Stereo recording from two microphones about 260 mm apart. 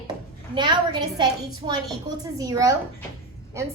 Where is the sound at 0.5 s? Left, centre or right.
Centre.